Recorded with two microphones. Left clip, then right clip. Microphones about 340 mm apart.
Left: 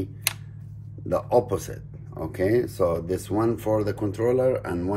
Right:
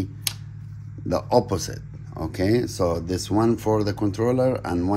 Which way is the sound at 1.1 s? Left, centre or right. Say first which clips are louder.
Right 1 dB; right.